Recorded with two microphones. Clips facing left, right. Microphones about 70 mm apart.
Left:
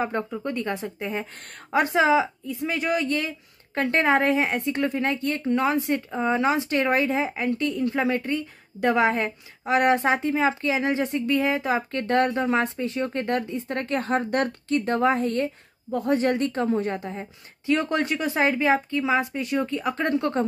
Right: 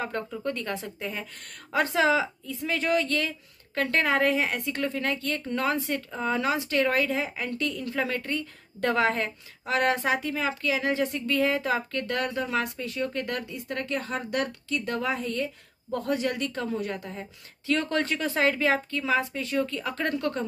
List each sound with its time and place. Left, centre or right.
0.0 s speech: left
12.0 s speech: left